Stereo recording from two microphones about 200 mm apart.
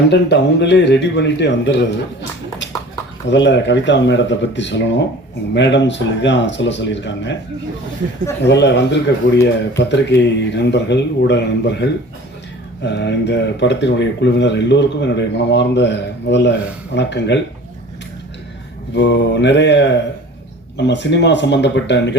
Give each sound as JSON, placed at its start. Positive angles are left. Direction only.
{"t": 0.1, "sound": "speech", "side_deg": 60}
{"t": 3.2, "sound": "speech", "side_deg": 60}
{"t": 8.4, "sound": "speech", "side_deg": 60}
{"t": 12.8, "sound": "speech", "side_deg": 60}
{"t": 18.9, "sound": "speech", "side_deg": 60}